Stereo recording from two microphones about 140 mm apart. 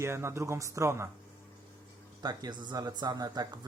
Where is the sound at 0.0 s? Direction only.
20° right (ahead or behind).